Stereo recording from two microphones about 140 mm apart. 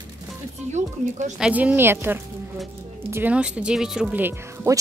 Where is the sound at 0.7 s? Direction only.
60° right (ahead or behind).